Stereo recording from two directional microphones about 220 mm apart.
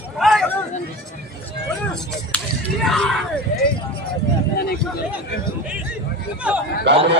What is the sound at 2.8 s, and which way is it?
Speech, centre (ahead or behind).